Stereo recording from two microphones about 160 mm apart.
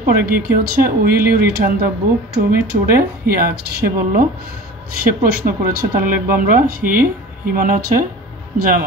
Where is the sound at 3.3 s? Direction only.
75° right (ahead or behind).